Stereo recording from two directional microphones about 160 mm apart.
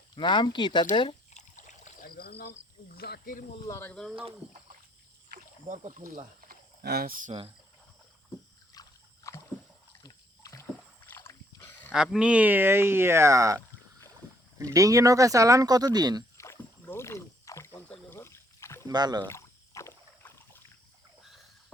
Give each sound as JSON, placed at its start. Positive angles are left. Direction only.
{"t": 0.2, "sound": "speech", "side_deg": 30}
{"t": 1.3, "sound": "rowboat", "side_deg": 50}
{"t": 2.4, "sound": "speech", "side_deg": 80}
{"t": 3.7, "sound": "speech", "side_deg": 15}
{"t": 5.3, "sound": "rowboat", "side_deg": -50}
{"t": 8.7, "sound": "a sound", "side_deg": 20}
{"t": 10.0, "sound": "rowboat", "side_deg": 20}
{"t": 11.9, "sound": "speech", "side_deg": -5}
{"t": 14.6, "sound": "speech", "side_deg": -20}
{"t": 16.8, "sound": "rowboat", "side_deg": 15}
{"t": 17.8, "sound": "a sound", "side_deg": 10}
{"t": 18.9, "sound": "speech", "side_deg": -25}
{"t": 19.3, "sound": "rowboat", "side_deg": 15}